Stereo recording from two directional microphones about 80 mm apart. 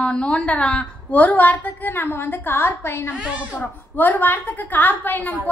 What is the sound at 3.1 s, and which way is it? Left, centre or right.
Speech, centre.